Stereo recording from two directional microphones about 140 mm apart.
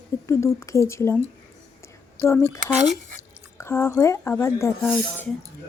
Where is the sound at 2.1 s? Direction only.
20° left (ahead or behind).